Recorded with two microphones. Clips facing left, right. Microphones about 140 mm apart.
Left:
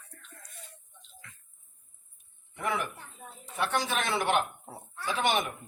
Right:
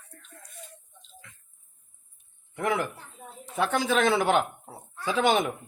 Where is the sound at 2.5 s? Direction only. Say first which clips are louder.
Right 5 dB; 90° right.